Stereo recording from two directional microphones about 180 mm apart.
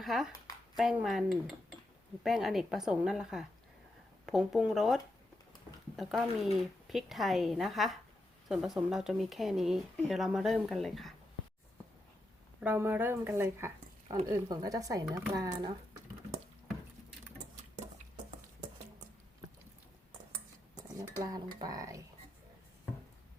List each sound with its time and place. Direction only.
0.0 s speech: centre (ahead or behind)
6.0 s speech: centre (ahead or behind)
12.5 s speech: 10° right (ahead or behind)
21.2 s speech: 20° right (ahead or behind)